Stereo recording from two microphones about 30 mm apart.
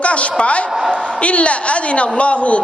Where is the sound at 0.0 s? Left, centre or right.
Left.